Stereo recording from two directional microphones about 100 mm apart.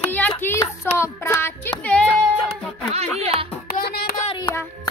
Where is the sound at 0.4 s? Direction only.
20° left (ahead or behind).